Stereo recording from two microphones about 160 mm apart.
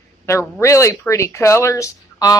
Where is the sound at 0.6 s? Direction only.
20° left (ahead or behind).